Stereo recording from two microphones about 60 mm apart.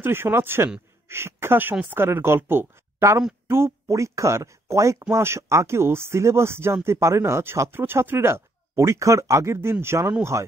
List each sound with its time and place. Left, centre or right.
0.0 s speech: right
7.7 s speech: right
10.3 s speech: right